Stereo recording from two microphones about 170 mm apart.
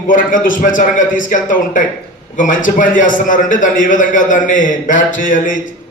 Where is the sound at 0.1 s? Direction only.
50° left (ahead or behind).